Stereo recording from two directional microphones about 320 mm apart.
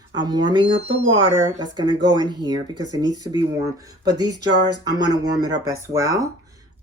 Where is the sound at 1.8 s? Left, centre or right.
Centre.